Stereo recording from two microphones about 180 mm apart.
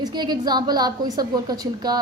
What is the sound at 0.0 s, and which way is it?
A woman's voice, 25° right (ahead or behind).